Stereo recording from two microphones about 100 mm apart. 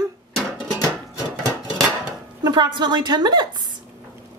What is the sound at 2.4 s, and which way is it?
A woman's voice, 50° right (ahead or behind).